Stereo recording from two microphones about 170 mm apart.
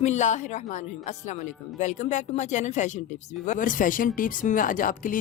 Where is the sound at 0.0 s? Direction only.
45° left (ahead or behind).